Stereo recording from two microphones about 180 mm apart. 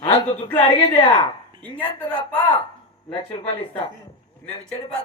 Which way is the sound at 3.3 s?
30° left (ahead or behind).